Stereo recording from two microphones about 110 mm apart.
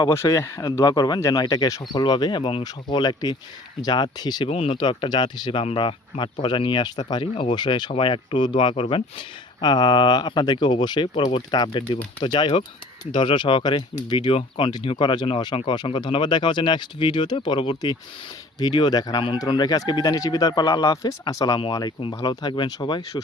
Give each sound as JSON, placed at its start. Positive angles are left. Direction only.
{"t": 0.1, "sound": "speech", "side_deg": 25}
{"t": 4.4, "sound": "speech", "side_deg": 65}